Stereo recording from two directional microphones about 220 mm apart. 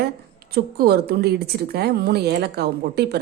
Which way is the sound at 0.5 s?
45° right (ahead or behind).